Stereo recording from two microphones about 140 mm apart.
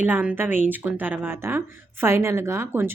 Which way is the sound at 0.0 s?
10° right (ahead or behind).